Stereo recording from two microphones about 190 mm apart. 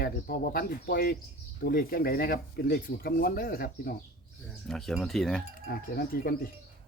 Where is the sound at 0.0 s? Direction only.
50° left (ahead or behind).